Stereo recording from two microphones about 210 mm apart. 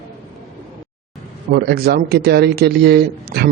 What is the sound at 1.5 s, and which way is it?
A man's voice, 45° right (ahead or behind).